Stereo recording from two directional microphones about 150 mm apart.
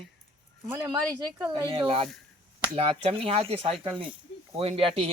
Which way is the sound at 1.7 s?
35° right (ahead or behind).